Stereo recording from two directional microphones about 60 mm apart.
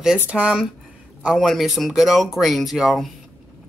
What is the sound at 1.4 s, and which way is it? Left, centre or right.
Speech, centre.